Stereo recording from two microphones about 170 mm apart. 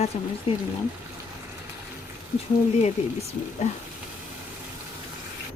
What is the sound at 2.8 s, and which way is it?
Speech, 40° left (ahead or behind).